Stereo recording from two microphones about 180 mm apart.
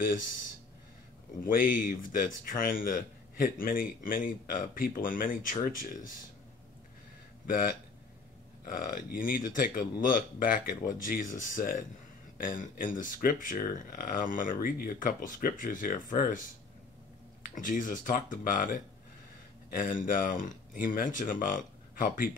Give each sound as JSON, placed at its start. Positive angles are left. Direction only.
{"t": 1.4, "sound": "speech", "side_deg": 50}
{"t": 7.4, "sound": "speech", "side_deg": 50}
{"t": 17.6, "sound": "speech", "side_deg": 50}